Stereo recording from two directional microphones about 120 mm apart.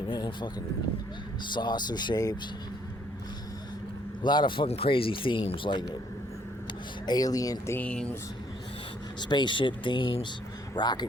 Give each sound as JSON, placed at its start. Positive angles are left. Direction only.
{"t": 0.1, "sound": "speech", "side_deg": 40}
{"t": 1.5, "sound": "speech", "side_deg": 40}
{"t": 4.2, "sound": "speech", "side_deg": 40}
{"t": 7.1, "sound": "speech", "side_deg": 30}
{"t": 7.8, "sound": "speech", "side_deg": 10}
{"t": 9.3, "sound": "speech", "side_deg": 40}